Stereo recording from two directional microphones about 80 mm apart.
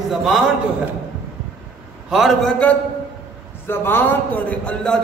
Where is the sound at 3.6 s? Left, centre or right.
Left.